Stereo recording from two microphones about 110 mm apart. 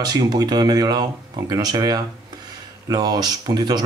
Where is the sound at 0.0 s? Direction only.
35° right (ahead or behind).